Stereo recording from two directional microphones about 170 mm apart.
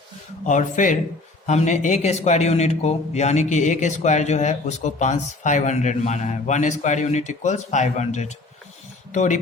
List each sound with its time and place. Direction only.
0.4 s a man's voice: 50° left (ahead or behind)